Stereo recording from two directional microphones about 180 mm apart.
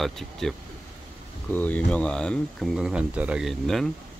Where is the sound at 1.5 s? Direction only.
10° left (ahead or behind).